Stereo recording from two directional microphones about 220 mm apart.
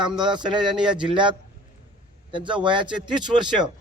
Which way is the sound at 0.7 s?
5° right (ahead or behind).